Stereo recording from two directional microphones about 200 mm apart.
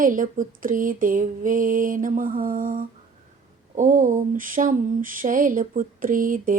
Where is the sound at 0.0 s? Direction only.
40° right (ahead or behind).